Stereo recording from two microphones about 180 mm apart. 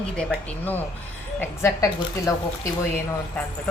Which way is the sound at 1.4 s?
15° left (ahead or behind).